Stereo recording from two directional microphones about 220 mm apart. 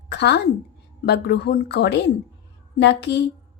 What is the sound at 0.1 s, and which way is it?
A woman's voice, 50° left (ahead or behind).